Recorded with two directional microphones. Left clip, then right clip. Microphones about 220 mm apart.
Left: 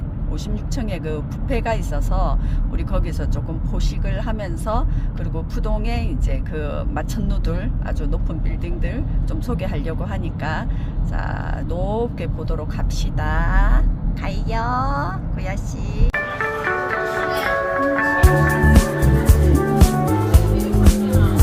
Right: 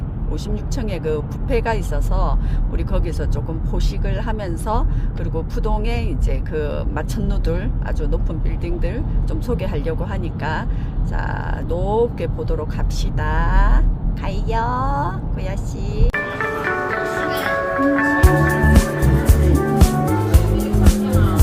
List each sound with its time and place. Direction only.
0.5 s speech: centre (ahead or behind)
4.3 s speech: centre (ahead or behind)
9.5 s speech: centre (ahead or behind)
11.7 s speech: centre (ahead or behind)
16.0 s music: centre (ahead or behind)